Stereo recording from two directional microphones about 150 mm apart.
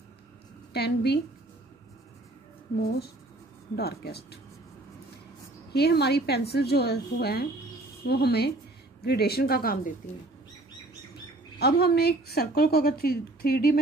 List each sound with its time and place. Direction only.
0.7 s a woman's voice: 90° left
3.7 s a woman's voice: 90° left
5.7 s a woman's voice: 90° left
11.6 s a woman's voice: 90° left